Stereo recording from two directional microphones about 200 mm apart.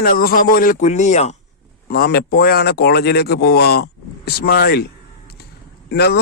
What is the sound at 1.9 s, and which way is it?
Speech, 50° left (ahead or behind).